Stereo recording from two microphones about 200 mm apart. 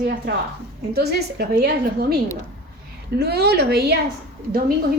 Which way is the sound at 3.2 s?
55° right (ahead or behind).